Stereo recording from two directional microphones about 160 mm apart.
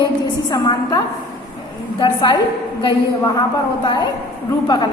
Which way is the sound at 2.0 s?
25° left (ahead or behind).